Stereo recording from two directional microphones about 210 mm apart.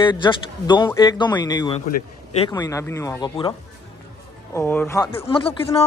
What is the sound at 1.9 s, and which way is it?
Speech, 30° left (ahead or behind).